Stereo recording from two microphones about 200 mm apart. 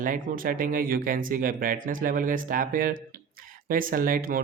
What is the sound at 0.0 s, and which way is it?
Speech, 45° right (ahead or behind).